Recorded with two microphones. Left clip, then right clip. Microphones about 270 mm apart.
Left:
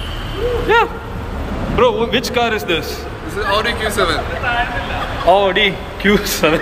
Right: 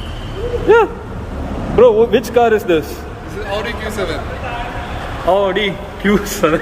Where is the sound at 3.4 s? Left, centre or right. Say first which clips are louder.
Left 5 dB; centre.